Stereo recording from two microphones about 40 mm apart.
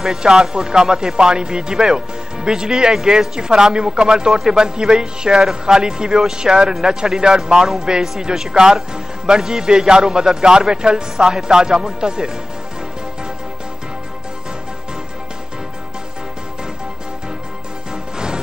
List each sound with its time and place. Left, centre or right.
0.0 s speech: centre